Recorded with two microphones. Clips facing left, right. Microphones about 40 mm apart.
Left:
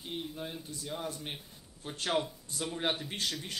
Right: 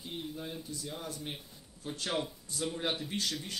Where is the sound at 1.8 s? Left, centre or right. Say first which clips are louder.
Left 3 dB; left.